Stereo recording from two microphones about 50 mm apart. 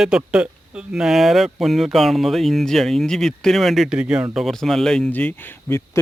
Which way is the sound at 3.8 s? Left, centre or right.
Centre.